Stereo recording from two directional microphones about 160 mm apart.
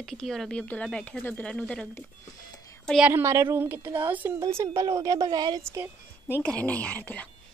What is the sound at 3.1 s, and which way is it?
A woman's voice, 15° right (ahead or behind).